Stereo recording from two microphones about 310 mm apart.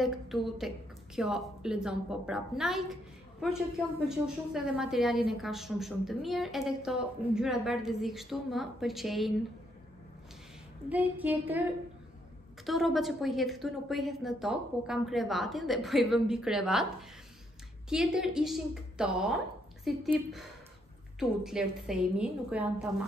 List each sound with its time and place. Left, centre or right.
0.0 s a woman's voice: centre
10.9 s a woman's voice: centre
12.6 s a woman's voice: centre
17.8 s a woman's voice: centre